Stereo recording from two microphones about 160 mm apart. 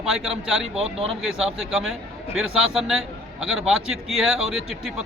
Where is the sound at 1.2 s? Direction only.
Centre (ahead or behind).